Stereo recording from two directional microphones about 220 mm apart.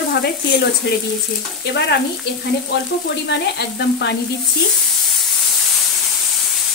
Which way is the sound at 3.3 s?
50° left (ahead or behind).